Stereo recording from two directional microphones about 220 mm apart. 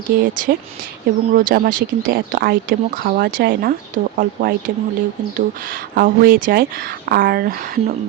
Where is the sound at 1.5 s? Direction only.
40° right (ahead or behind).